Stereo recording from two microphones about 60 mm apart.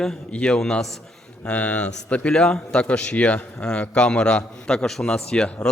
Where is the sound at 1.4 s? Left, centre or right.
Left.